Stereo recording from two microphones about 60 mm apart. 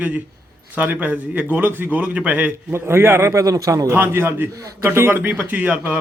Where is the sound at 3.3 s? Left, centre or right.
Right.